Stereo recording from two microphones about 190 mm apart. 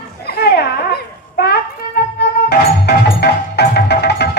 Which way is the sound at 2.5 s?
60° left (ahead or behind).